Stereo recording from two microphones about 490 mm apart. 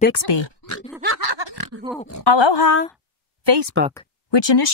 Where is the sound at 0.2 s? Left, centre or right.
Left.